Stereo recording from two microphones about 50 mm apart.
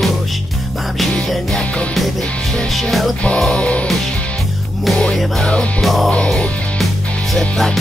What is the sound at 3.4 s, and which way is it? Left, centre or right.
Music, centre.